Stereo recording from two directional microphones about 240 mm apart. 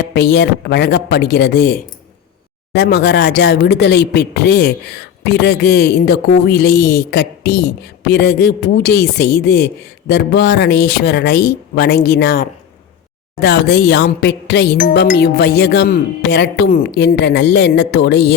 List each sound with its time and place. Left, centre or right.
0.1 s speech: left